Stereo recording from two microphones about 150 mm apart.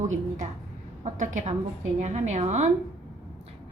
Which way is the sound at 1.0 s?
55° right (ahead or behind).